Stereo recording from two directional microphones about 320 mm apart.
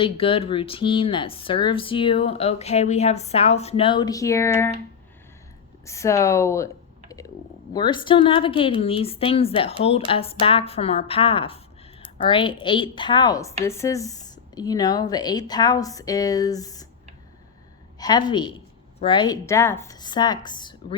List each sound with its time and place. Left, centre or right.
0.0 s speech: centre
5.8 s speech: centre
7.7 s speech: centre
18.0 s speech: centre